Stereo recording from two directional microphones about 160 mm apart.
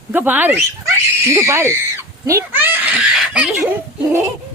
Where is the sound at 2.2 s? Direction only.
15° right (ahead or behind).